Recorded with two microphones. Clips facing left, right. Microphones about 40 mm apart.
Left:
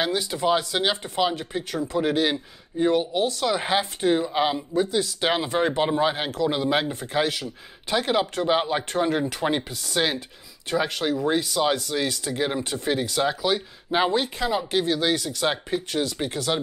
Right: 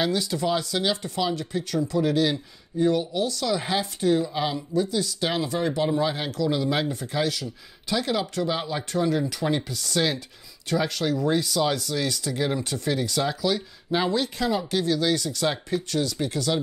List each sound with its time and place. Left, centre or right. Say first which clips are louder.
0.0 s speech: left 1 dB; left
9.6 s speech: even; left